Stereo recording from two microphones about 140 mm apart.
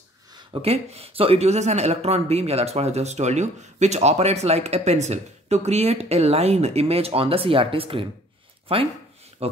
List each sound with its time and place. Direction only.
0.6 s a man's voice: 45° right (ahead or behind)